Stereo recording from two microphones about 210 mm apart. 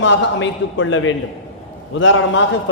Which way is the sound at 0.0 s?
60° left (ahead or behind).